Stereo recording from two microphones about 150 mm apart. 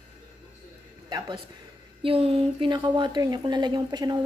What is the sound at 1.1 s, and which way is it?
A woman's voice, 30° right (ahead or behind).